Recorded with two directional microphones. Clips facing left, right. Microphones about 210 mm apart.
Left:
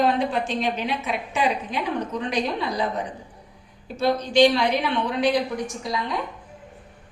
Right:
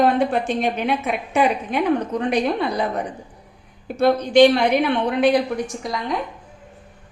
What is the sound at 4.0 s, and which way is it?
Speech, 55° right (ahead or behind).